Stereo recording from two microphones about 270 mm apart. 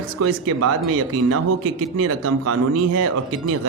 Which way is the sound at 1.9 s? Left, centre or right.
Right.